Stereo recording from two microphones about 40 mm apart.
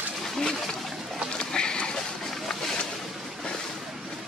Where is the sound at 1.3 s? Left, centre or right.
Left.